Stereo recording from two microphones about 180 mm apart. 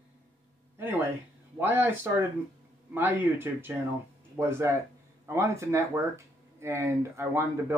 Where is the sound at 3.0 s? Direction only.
10° right (ahead or behind).